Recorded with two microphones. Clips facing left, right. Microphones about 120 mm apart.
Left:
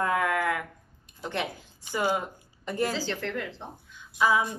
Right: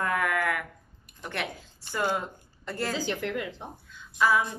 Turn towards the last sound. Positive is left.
turn(degrees=15)  # may be behind; listen again after turning